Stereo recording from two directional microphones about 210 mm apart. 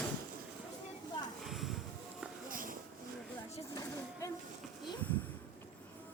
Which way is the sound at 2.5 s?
40° right (ahead or behind).